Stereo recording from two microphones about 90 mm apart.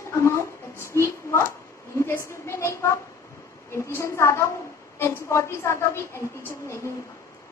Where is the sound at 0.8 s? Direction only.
30° left (ahead or behind).